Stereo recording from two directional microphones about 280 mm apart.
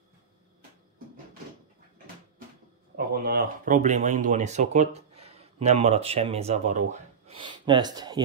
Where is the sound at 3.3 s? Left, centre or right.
Right.